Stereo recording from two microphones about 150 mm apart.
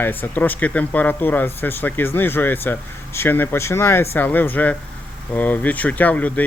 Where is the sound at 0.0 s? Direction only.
15° left (ahead or behind).